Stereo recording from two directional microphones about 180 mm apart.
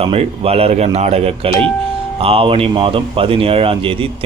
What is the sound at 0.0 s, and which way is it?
A man's voice, 35° right (ahead or behind).